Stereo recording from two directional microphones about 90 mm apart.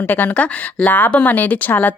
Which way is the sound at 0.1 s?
20° left (ahead or behind).